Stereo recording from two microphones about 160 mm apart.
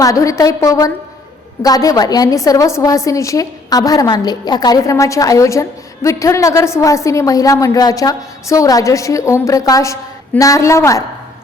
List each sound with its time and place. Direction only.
0.0 s a woman's voice: 20° left (ahead or behind)